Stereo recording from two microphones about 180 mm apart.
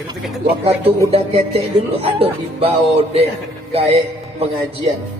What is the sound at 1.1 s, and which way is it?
Speech, 30° right (ahead or behind).